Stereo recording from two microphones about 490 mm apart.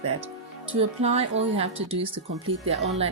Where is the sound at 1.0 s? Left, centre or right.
Centre.